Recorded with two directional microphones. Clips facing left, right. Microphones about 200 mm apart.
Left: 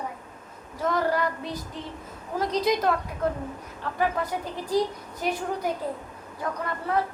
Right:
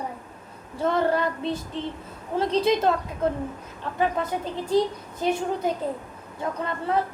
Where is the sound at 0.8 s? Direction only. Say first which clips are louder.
Right 2 dB; 25° right (ahead or behind).